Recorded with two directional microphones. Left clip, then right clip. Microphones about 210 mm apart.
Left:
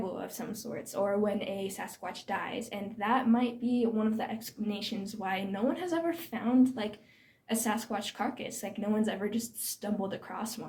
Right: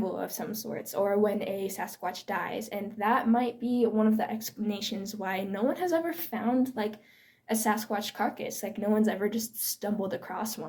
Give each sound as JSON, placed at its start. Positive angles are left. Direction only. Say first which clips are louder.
{"t": 0.2, "sound": "speech", "louder": "right 4 dB", "side_deg": -40}